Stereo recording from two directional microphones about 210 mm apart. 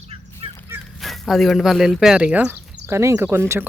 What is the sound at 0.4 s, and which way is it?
Fowl, 25° right (ahead or behind).